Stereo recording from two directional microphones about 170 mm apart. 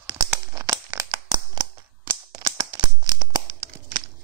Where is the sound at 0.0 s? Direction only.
25° right (ahead or behind).